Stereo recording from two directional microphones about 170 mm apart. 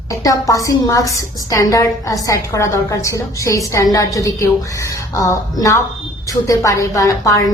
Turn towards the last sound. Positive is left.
turn(degrees=20)  # may be behind; listen again after turning